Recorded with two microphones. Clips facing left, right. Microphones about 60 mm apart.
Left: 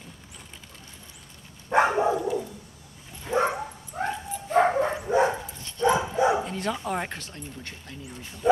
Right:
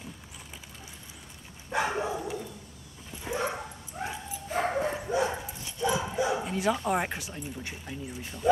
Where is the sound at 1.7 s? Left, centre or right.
Left.